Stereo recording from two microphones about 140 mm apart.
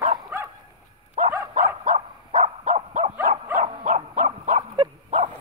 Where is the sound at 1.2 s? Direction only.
60° right (ahead or behind).